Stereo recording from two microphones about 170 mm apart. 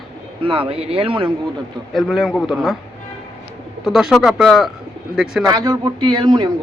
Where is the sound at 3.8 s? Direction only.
5° right (ahead or behind).